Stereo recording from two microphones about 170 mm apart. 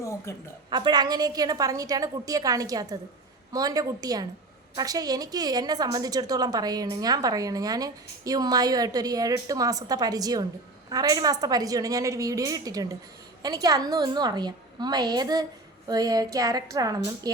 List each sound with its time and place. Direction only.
0.3 s a woman's voice: 15° left (ahead or behind)
0.7 s a woman's voice: 25° right (ahead or behind)